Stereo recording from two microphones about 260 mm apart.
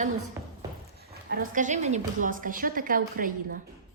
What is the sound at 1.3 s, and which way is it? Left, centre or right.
A woman's voice, right.